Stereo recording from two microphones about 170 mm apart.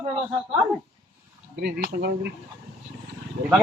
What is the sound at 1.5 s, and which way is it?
Speech, 70° right (ahead or behind).